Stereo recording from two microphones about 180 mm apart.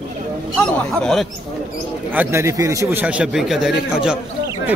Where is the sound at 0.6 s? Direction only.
5° left (ahead or behind).